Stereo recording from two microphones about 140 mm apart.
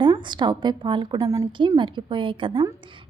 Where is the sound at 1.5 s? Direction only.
35° right (ahead or behind).